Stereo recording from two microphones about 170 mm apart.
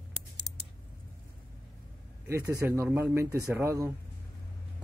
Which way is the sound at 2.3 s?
15° right (ahead or behind).